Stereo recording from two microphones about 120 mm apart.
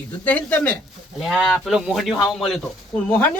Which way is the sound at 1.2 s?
Centre (ahead or behind).